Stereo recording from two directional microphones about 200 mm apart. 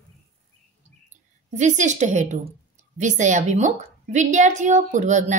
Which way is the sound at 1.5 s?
35° right (ahead or behind).